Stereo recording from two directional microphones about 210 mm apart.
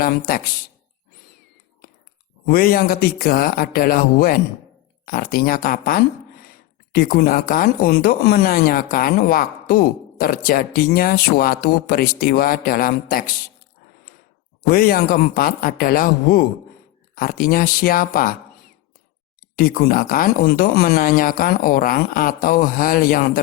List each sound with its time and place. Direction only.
0.0 s speech: 45° left (ahead or behind)
2.5 s speech: 45° left (ahead or behind)
14.7 s speech: 45° left (ahead or behind)
19.5 s speech: 45° left (ahead or behind)